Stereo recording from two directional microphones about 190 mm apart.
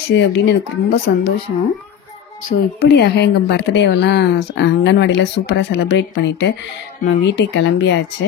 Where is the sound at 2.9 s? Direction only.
60° left (ahead or behind).